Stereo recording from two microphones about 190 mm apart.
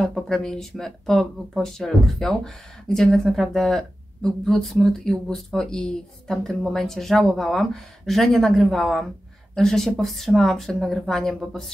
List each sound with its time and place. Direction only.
0.0 s speech: centre (ahead or behind)